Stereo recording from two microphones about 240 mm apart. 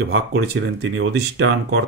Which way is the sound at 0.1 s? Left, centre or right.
Right.